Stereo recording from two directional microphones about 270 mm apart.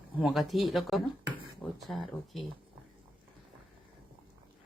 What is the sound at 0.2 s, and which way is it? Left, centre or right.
Speech, centre.